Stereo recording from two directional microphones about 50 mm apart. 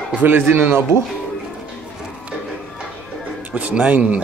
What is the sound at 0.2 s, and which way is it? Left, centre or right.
Speech, right.